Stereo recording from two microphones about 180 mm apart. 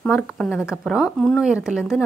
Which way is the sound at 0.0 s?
Centre (ahead or behind).